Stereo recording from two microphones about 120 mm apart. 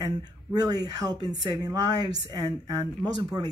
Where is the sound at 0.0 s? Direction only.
30° right (ahead or behind).